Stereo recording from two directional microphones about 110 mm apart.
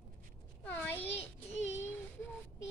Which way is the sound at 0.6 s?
15° left (ahead or behind).